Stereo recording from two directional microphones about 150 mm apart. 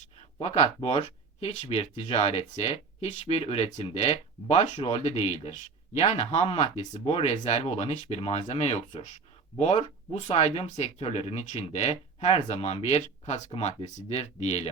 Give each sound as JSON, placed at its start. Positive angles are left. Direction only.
{"t": 0.4, "sound": "speech", "side_deg": 45}